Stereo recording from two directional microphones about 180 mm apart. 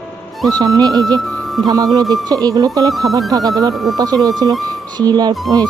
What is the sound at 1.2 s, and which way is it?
Music, centre (ahead or behind).